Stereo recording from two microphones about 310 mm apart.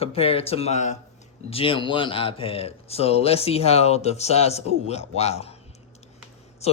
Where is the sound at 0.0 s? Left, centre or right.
Centre.